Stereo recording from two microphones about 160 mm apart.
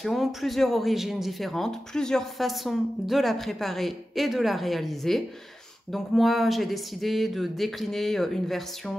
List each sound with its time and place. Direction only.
0.0 s speech: centre (ahead or behind)